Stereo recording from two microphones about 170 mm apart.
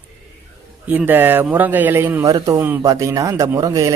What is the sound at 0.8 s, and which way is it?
A man's voice, 10° right (ahead or behind).